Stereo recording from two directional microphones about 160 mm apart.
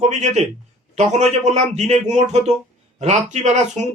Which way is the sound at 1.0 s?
45° right (ahead or behind).